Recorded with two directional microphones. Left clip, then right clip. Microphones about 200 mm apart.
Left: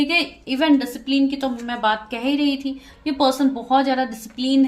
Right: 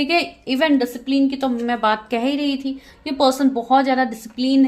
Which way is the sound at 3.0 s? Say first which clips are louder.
Right 1 dB; 30° right (ahead or behind).